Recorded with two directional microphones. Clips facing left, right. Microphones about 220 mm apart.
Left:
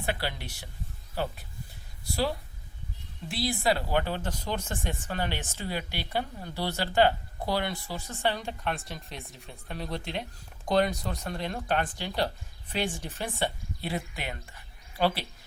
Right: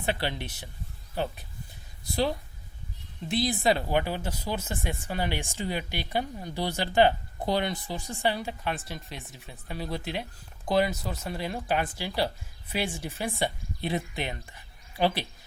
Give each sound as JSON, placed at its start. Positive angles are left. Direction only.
{"t": 0.0, "sound": "speech", "side_deg": -20}
{"t": 3.2, "sound": "speech", "side_deg": -20}